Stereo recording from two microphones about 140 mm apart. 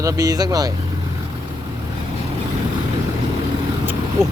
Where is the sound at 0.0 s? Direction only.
25° right (ahead or behind).